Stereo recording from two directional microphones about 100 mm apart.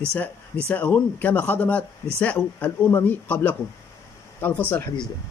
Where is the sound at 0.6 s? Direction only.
15° left (ahead or behind).